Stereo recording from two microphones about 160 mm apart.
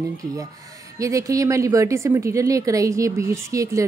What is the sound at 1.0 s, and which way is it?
A woman's voice, 20° right (ahead or behind).